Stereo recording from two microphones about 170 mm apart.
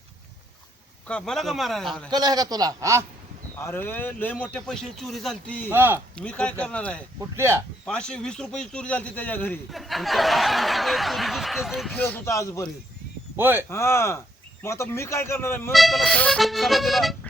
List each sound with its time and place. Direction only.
1.0 s snicker: 5° left (ahead or behind)
2.0 s a man's voice: 25° right (ahead or behind)
3.6 s speech: 10° left (ahead or behind)
5.7 s speech: 10° right (ahead or behind)
6.1 s speech: 5° left (ahead or behind)
7.2 s speech: 15° right (ahead or behind)
7.9 s snicker: 5° left (ahead or behind)
13.3 s speech: 10° right (ahead or behind)
13.7 s speech: 15° left (ahead or behind)
15.7 s snicker: centre (ahead or behind)